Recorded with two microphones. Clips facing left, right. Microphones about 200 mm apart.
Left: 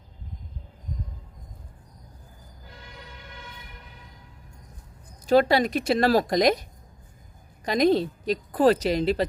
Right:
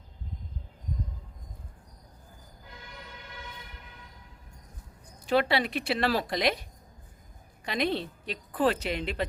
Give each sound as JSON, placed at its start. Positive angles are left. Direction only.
{"t": 5.2, "sound": "a woman's voice", "side_deg": 40}